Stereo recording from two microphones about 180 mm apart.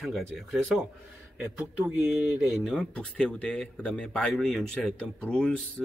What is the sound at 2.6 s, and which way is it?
Speech, 5° left (ahead or behind).